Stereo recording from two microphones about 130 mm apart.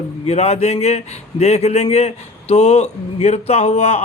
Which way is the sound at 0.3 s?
55° left (ahead or behind).